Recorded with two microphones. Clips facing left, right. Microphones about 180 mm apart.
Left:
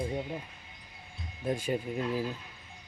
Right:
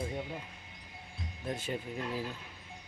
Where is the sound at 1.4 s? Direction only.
10° left (ahead or behind).